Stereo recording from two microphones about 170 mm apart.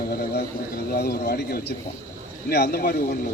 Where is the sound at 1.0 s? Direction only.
70° left (ahead or behind).